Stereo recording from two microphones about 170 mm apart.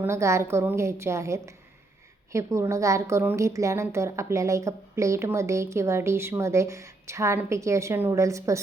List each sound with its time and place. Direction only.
0.0 s a woman's voice: 15° right (ahead or behind)